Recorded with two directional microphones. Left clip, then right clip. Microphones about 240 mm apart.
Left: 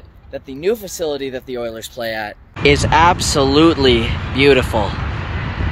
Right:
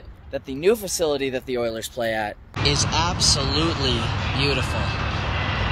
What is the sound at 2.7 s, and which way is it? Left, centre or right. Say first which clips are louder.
Speech: left 11 dB; left.